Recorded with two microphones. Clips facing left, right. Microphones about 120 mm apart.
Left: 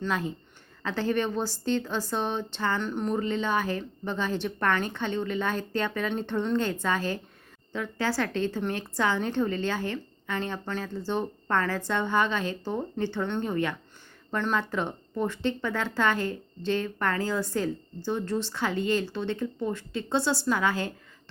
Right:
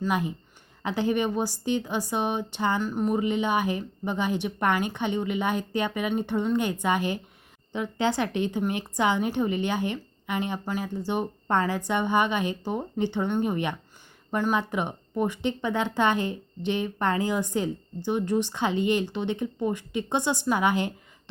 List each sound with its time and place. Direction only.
0.0 s speech: 15° right (ahead or behind)